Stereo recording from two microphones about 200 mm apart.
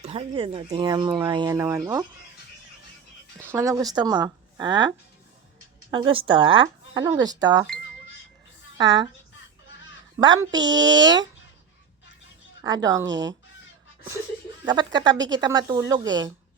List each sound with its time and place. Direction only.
0.0 s speech: 30° right (ahead or behind)
3.5 s speech: 15° right (ahead or behind)
10.2 s speech: 20° right (ahead or behind)
12.6 s speech: 20° right (ahead or behind)
14.6 s speech: 20° right (ahead or behind)